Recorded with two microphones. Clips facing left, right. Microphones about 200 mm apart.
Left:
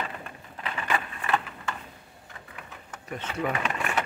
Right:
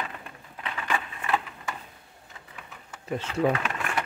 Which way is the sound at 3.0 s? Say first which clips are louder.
Right 5 dB; 30° right (ahead or behind).